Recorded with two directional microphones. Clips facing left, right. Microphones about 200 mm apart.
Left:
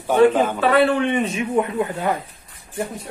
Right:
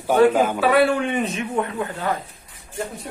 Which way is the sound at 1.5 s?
15° left (ahead or behind).